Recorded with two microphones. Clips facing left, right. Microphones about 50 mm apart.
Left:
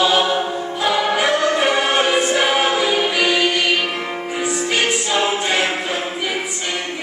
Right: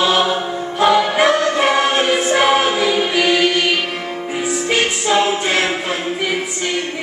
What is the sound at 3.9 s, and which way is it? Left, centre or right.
Music, left.